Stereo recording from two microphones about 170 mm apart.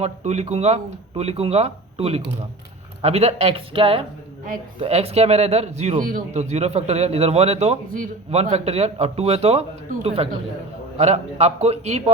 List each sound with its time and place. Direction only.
0.0 s a man's voice: 40° right (ahead or behind)
7.9 s a man's voice: 55° right (ahead or behind)
8.3 s a man's voice: 40° right (ahead or behind)